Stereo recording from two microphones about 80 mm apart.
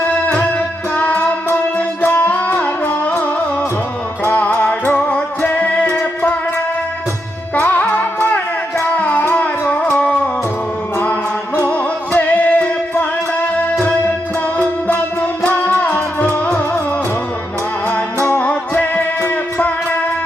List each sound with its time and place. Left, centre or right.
0.0 s music: centre
4.2 s music: left
7.5 s music: left
11.7 s music: centre
14.6 s music: left
18.3 s music: left